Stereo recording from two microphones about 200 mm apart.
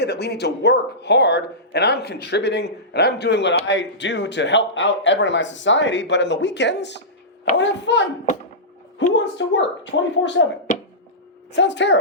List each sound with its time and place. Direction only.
0.0 s speech: 55° left (ahead or behind)
9.1 s speech: 65° left (ahead or behind)
11.5 s speech: 60° left (ahead or behind)